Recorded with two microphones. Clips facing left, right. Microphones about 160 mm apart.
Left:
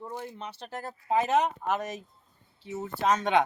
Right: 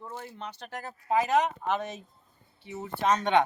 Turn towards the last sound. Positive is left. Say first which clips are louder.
# even
turn(degrees=5)  # may be behind; listen again after turning